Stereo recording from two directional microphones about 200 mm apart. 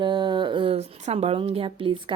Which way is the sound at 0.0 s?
20° right (ahead or behind).